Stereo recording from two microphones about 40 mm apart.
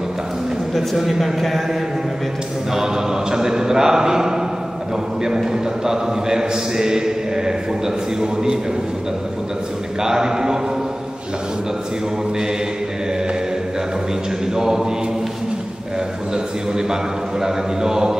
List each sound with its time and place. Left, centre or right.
0.7 s a man's voice: centre
2.7 s a man's voice: centre
10.0 s a man's voice: centre
14.5 s a man's voice: centre
17.4 s a man's voice: centre